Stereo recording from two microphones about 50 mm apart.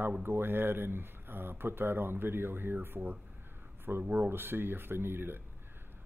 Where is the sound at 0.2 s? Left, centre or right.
Right.